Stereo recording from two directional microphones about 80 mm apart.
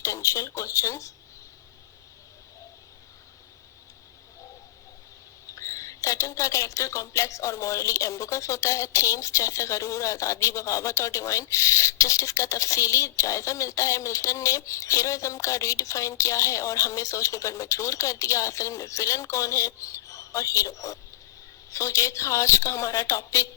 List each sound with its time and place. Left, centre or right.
0.0 s speech: left
5.5 s speech: left